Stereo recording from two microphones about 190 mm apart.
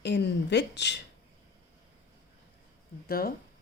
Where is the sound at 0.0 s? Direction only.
65° left (ahead or behind).